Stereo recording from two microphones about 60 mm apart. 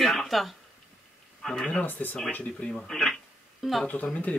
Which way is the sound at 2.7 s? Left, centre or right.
Centre.